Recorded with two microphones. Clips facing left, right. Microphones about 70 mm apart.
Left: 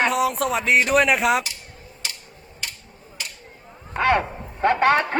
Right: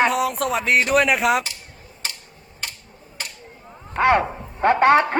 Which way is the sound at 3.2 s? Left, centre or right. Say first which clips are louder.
Right 1 dB; right.